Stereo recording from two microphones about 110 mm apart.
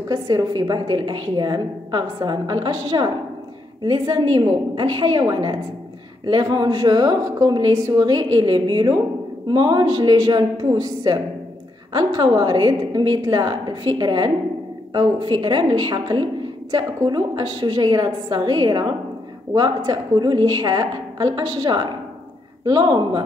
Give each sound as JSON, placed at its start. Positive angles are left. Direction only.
{"t": 0.1, "sound": "a woman's voice", "side_deg": -35}